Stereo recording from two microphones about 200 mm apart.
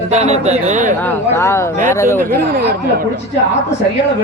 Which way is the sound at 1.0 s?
10° left (ahead or behind).